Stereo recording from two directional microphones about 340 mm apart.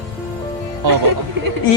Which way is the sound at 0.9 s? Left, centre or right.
Right.